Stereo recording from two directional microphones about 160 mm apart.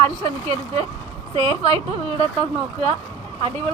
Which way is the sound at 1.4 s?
35° right (ahead or behind).